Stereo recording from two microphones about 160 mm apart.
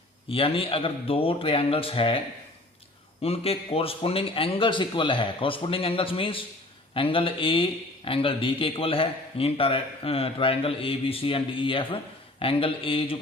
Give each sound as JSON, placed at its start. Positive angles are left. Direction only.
{"t": 0.3, "sound": "speech", "side_deg": 35}